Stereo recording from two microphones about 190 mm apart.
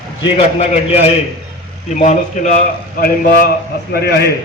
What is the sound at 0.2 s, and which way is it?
A man's voice, 30° left (ahead or behind).